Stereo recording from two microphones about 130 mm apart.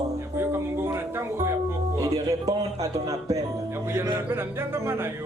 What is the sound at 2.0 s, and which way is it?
Speech, 25° right (ahead or behind).